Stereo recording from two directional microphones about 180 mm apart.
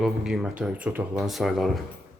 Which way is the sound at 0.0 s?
Centre (ahead or behind).